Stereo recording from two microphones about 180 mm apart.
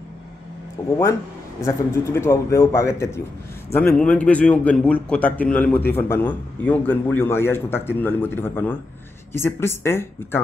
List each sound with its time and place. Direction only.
0.8 s a man's voice: 15° left (ahead or behind)